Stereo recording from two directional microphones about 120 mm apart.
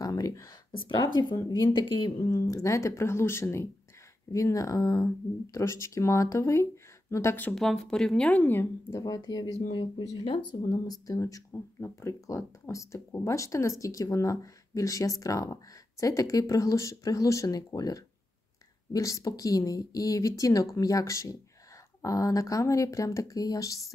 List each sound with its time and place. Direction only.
0.0 s speech: 30° left (ahead or behind)
7.5 s speech: 5° left (ahead or behind)
9.0 s speech: 30° left (ahead or behind)
9.7 s speech: 45° left (ahead or behind)